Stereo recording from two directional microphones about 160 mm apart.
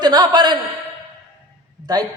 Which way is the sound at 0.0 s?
25° right (ahead or behind).